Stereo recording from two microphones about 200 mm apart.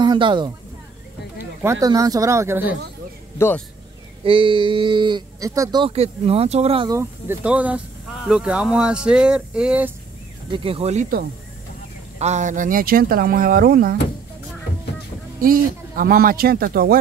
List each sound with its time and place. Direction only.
0.0 s speech: 25° right (ahead or behind)
3.3 s speech: 10° left (ahead or behind)
4.2 s speech: 25° right (ahead or behind)
6.9 s speech: 10° right (ahead or behind)
10.5 s speech: 25° right (ahead or behind); by 13.9 s 50° right (ahead or behind)
15.4 s speech: 45° right (ahead or behind)